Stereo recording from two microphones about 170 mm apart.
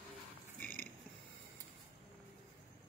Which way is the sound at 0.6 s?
10° left (ahead or behind).